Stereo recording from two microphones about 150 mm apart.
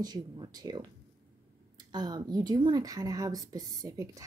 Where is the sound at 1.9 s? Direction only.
25° right (ahead or behind).